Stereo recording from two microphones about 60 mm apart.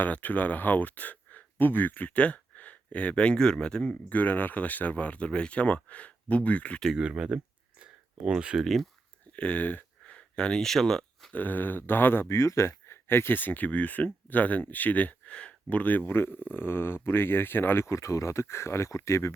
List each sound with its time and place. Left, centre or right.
0.0 s speech: left
4.1 s speech: left
6.9 s speech: centre
7.8 s a sound: centre
8.6 s speech: centre
9.3 s speech: left
10.0 s a sound: centre
11.3 s speech: left
16.0 s speech: left